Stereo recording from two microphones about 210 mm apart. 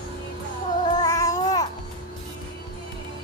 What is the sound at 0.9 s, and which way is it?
Babbling, 15° left (ahead or behind).